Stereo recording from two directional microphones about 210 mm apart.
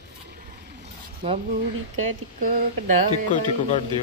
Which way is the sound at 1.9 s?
35° right (ahead or behind).